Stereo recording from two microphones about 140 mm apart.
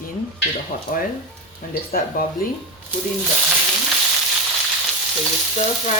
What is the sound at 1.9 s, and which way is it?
Speech, 90° left.